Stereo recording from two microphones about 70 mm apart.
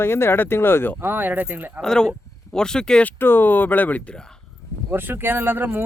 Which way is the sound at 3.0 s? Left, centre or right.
Left.